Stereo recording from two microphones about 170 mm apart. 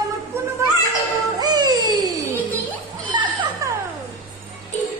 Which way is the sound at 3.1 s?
25° right (ahead or behind).